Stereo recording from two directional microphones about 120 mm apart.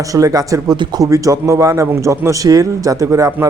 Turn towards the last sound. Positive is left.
turn(degrees=-25)  # may be behind; listen again after turning